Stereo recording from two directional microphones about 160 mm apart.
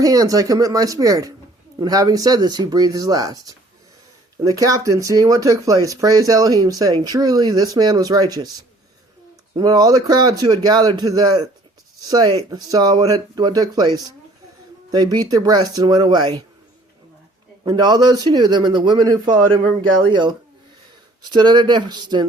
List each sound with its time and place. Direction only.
0.0 s speech: 20° right (ahead or behind)
4.6 s speech: 20° right (ahead or behind)
9.6 s speech: 25° right (ahead or behind)
17.6 s speech: 25° right (ahead or behind)